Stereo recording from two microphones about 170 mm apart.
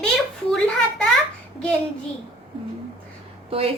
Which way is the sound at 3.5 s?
35° right (ahead or behind).